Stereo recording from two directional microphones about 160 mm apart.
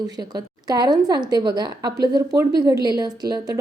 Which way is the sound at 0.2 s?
25° right (ahead or behind).